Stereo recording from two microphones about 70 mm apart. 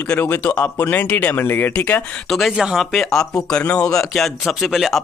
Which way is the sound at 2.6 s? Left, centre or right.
Centre.